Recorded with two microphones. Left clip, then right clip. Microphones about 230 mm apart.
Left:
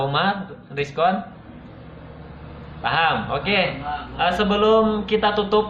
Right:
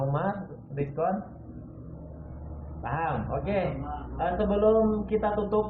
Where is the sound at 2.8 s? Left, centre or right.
Centre.